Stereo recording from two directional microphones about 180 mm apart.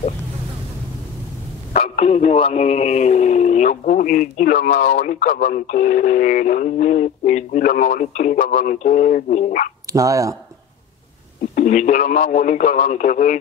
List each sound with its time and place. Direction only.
1.7 s a man's voice: 35° left (ahead or behind)
9.9 s speech: 20° right (ahead or behind)
11.5 s a man's voice: 45° left (ahead or behind)